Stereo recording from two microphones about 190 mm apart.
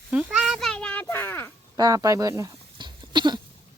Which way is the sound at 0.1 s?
5° right (ahead or behind).